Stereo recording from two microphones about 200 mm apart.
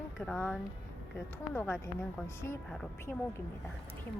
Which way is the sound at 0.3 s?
10° left (ahead or behind).